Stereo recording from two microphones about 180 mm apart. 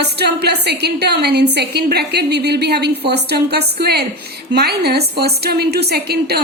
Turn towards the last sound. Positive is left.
turn(degrees=-65)  # may be behind; listen again after turning